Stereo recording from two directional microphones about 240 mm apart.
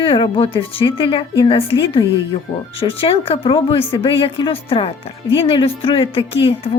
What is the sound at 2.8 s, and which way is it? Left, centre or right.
Speech, left.